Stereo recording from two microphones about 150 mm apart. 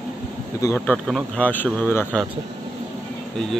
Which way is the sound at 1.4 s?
10° left (ahead or behind).